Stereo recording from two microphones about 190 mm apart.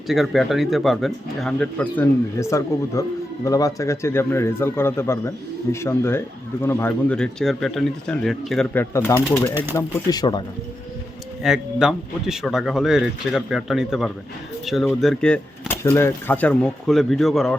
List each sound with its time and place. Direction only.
0.1 s speech: centre (ahead or behind); by 10.4 s 20° left (ahead or behind)
11.4 s speech: 5° right (ahead or behind)